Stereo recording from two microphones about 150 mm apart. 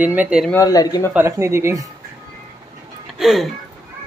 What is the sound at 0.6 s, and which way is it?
Speech, 25° left (ahead or behind).